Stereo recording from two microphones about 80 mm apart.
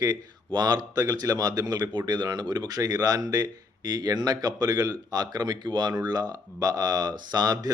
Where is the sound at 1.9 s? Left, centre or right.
Right.